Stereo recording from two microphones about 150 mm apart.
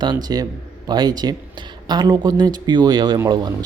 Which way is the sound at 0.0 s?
30° right (ahead or behind).